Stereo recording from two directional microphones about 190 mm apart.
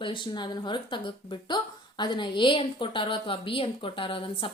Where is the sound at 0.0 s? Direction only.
25° left (ahead or behind).